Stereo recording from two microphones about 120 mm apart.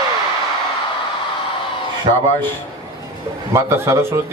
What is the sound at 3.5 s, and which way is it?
Speech, 25° right (ahead or behind).